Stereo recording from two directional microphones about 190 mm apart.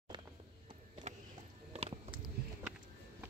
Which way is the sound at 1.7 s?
35° right (ahead or behind).